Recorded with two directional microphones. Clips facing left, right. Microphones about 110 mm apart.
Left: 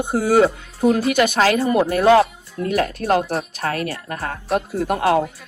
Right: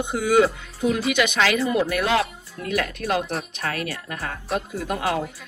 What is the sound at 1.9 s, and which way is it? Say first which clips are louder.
A woman's voice: left 8 dB; 35° left (ahead or behind).